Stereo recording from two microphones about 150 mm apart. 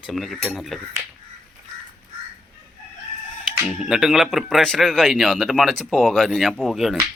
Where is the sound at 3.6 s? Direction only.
5° right (ahead or behind).